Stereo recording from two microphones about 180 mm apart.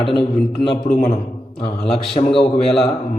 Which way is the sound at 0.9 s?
45° left (ahead or behind).